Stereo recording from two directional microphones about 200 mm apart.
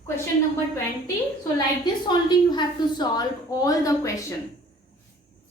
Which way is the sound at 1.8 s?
20° left (ahead or behind).